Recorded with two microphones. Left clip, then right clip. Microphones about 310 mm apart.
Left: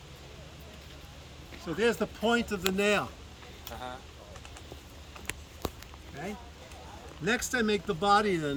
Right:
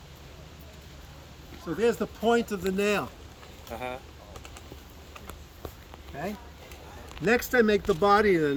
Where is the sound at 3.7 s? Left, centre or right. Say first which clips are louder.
Right 6 dB; right.